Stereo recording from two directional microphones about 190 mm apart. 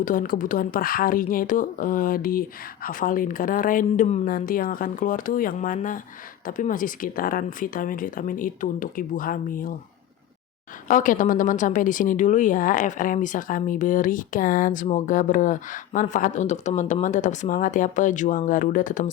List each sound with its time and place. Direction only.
0.0 s a woman's voice: 45° left (ahead or behind)
10.8 s a woman's voice: 45° left (ahead or behind)